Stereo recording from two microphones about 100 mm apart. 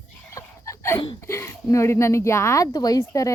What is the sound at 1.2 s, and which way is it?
Speech, 30° left (ahead or behind).